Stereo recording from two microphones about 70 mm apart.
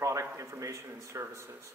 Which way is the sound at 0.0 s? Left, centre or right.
Right.